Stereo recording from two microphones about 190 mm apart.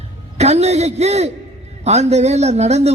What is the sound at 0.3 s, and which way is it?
A man's voice, 35° right (ahead or behind).